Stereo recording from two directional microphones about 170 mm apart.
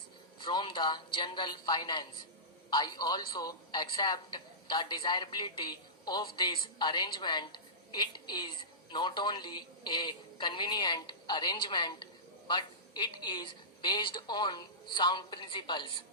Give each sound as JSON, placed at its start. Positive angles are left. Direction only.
{"t": 0.3, "sound": "speech", "side_deg": 25}